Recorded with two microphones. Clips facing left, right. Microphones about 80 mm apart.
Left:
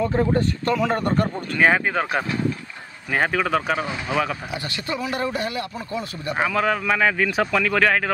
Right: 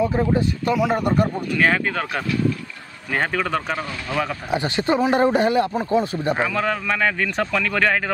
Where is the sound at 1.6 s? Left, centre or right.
Centre.